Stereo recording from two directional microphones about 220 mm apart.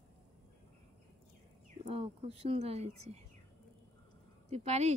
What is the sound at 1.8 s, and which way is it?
Speech, 25° right (ahead or behind).